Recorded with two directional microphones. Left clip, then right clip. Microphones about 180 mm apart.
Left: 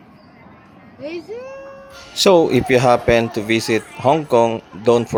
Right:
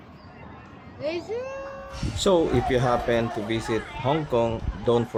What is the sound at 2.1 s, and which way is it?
Speech, 40° left (ahead or behind).